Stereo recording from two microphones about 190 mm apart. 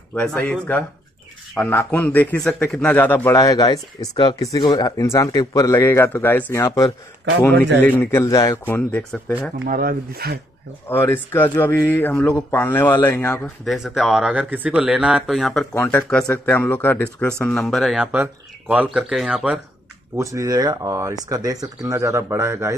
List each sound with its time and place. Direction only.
0.1 s a man's voice: 5° left (ahead or behind)
9.7 s speech: 50° right (ahead or behind)
10.9 s a man's voice: 10° left (ahead or behind)
13.7 s a man's voice: centre (ahead or behind)
20.2 s speech: 15° right (ahead or behind)